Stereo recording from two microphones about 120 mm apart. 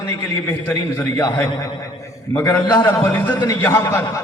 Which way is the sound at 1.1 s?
35° left (ahead or behind).